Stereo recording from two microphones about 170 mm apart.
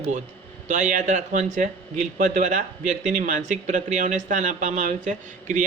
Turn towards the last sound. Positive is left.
turn(degrees=-45)  # may be behind; listen again after turning